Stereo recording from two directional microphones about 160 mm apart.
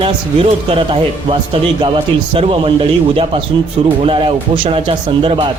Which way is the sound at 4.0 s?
35° right (ahead or behind).